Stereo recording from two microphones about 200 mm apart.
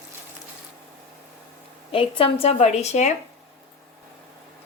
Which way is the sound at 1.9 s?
30° left (ahead or behind).